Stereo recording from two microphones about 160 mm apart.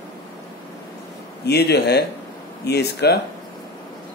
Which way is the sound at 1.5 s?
90° left.